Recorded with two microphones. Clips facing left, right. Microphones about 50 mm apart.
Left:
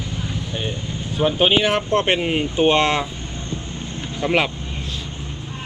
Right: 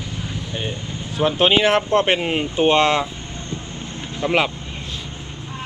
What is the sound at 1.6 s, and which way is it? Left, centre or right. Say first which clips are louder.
Speech: right 3 dB; right.